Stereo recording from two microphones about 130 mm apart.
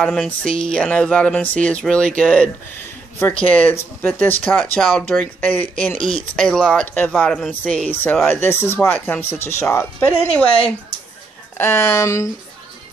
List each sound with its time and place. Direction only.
0.0 s speech: 5° left (ahead or behind)